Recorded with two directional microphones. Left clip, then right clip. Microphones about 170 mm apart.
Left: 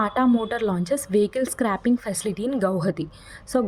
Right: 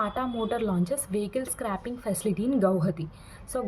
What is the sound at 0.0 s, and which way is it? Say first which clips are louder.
A woman's voice: left 7 dB; 45° left (ahead or behind).